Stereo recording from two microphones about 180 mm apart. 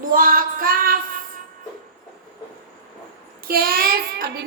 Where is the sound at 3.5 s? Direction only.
55° right (ahead or behind).